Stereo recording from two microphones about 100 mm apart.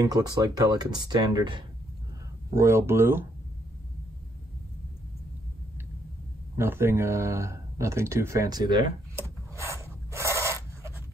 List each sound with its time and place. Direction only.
0.0 s speech: 40° right (ahead or behind)
2.5 s speech: 30° right (ahead or behind)
6.5 s speech: 25° right (ahead or behind); by 8.8 s 45° right (ahead or behind)
9.1 s a sound: 30° right (ahead or behind)